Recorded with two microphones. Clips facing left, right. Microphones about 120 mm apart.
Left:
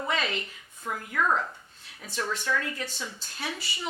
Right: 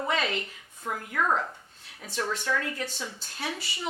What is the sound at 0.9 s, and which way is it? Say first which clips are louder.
A woman's voice: even; 40° right (ahead or behind).